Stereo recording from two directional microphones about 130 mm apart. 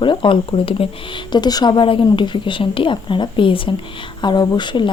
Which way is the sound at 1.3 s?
35° left (ahead or behind).